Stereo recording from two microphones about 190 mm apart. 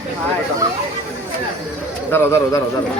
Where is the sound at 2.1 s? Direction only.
10° left (ahead or behind).